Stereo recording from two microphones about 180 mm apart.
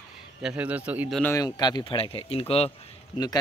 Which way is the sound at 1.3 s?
20° left (ahead or behind).